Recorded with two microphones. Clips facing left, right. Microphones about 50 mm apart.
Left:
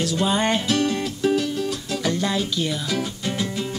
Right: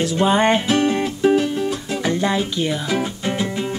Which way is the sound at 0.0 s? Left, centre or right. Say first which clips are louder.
Right 5 dB; right.